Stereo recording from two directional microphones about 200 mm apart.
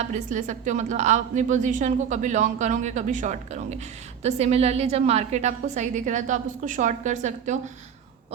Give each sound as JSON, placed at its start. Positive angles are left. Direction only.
{"t": 0.0, "sound": "a woman's voice", "side_deg": -35}